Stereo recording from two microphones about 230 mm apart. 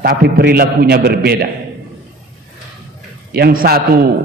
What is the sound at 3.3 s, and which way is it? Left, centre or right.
Speech, right.